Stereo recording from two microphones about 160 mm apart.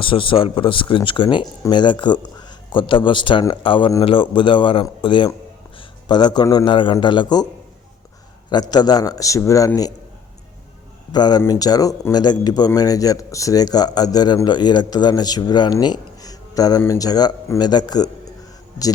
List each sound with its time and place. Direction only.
0.0 s a man's voice: 35° left (ahead or behind)
8.4 s a man's voice: 25° left (ahead or behind)
11.1 s a man's voice: 25° left (ahead or behind)